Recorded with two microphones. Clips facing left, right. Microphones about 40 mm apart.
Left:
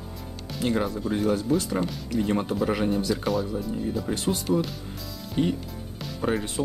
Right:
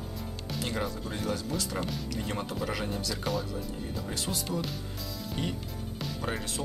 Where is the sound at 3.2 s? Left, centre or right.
Centre.